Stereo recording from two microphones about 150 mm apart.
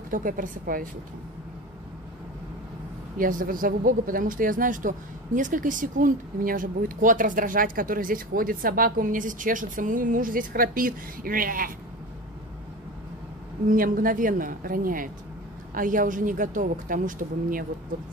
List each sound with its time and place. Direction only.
0.1 s speech: 65° right (ahead or behind)
3.2 s speech: 65° right (ahead or behind)
13.7 s speech: 65° right (ahead or behind)